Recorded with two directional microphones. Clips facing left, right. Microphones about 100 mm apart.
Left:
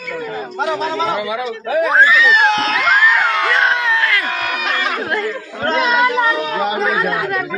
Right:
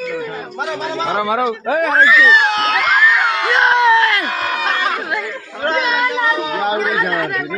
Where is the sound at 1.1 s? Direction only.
45° right (ahead or behind).